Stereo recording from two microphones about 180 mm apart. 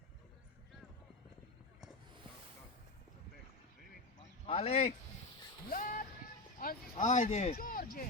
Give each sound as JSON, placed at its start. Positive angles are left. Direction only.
{"t": 4.4, "sound": "speech", "side_deg": 35}
{"t": 5.6, "sound": "vehicle", "side_deg": 50}
{"t": 6.6, "sound": "speech", "side_deg": 50}
{"t": 7.6, "sound": "speech", "side_deg": 50}